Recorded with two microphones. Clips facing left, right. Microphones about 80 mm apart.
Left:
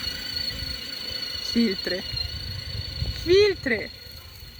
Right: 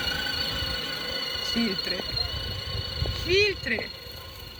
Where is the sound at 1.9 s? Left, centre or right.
Right.